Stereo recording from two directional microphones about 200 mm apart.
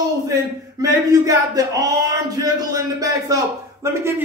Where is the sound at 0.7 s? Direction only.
20° right (ahead or behind).